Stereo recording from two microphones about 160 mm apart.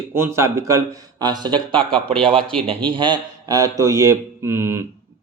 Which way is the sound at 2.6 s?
30° right (ahead or behind).